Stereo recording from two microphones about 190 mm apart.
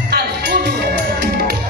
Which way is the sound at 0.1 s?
55° right (ahead or behind).